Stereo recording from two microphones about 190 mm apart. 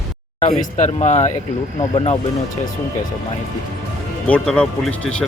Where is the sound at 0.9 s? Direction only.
35° left (ahead or behind).